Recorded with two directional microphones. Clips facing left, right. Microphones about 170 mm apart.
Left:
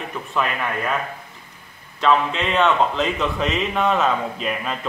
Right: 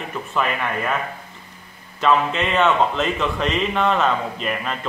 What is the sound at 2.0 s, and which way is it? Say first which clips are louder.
A man's voice: even; centre (ahead or behind).